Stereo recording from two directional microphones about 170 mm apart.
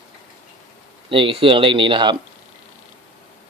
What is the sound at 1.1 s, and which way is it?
A man's voice, 30° right (ahead or behind).